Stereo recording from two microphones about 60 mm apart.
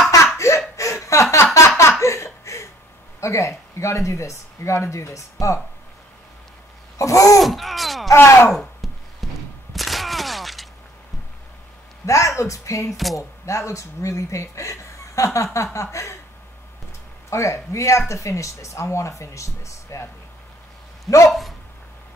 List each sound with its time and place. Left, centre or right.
0.4 s laughter: left
0.7 s chuckle: left
1.8 s laughter: left
3.2 s speech: left
7.0 s babbling: left
7.3 s groan: centre
8.1 s speech: left
8.5 s a sound: centre
12.1 s speech: left
12.9 s speech: centre
13.5 s speech: left
17.3 s speech: left
21.3 s speech: centre